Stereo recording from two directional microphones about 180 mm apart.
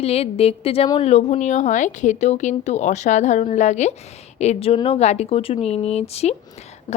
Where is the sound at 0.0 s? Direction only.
35° left (ahead or behind).